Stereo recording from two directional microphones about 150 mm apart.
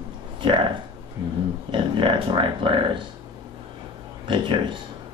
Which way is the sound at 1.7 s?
30° right (ahead or behind).